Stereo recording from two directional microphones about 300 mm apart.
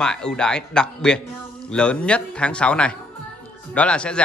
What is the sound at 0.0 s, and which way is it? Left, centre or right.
A man's voice, centre.